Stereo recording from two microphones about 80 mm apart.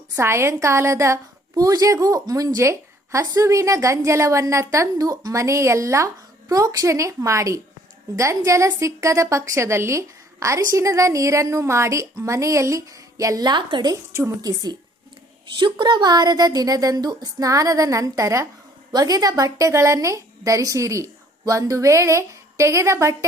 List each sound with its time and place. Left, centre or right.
0.2 s a woman's voice: right
1.5 s a woman's voice: right
13.9 s a woman's voice: right
15.4 s a woman's voice: right
18.9 s a woman's voice: right